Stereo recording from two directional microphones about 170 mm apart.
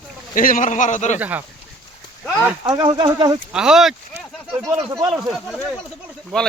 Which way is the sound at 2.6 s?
30° right (ahead or behind).